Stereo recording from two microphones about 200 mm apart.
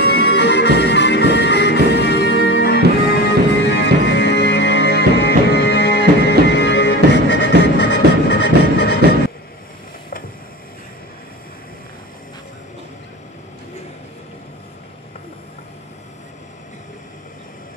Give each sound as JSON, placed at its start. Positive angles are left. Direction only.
{"t": 0.0, "sound": "music", "side_deg": 55}